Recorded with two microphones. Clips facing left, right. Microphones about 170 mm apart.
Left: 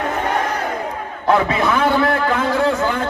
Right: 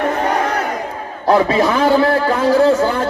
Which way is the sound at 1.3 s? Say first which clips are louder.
Right 3 dB; 35° right (ahead or behind).